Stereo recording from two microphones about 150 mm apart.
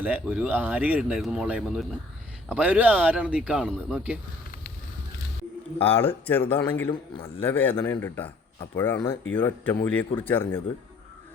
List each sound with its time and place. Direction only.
0.0 s speech: 10° right (ahead or behind)
5.8 s a man's voice: 15° left (ahead or behind)